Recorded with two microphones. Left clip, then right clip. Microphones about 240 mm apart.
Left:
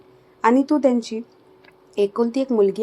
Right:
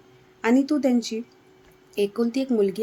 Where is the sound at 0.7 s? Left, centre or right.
Centre.